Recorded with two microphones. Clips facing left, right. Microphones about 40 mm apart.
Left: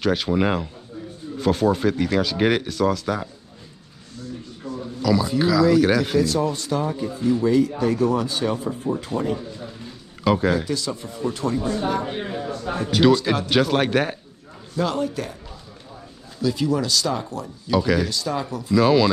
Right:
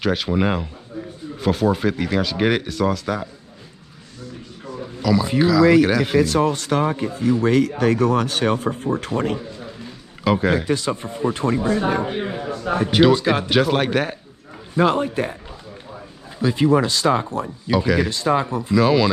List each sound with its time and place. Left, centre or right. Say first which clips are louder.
0.0 s speech: even; centre
5.0 s speech: right 2 dB; centre
6.1 s speech: right 3 dB; right
10.2 s speech: right 1 dB; centre
10.5 s speech: right 3 dB; right
13.1 s speech: right 2 dB; centre
13.5 s speech: left 1 dB; centre
14.7 s speech: right 5 dB; right
16.3 s speech: right 5 dB; right
18.8 s speech: even; centre